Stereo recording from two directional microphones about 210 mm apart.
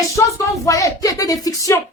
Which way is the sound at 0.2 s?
15° left (ahead or behind).